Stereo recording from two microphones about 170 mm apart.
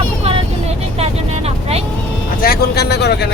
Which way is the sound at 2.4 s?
65° left (ahead or behind).